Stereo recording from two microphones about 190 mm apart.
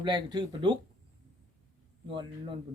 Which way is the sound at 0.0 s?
25° right (ahead or behind).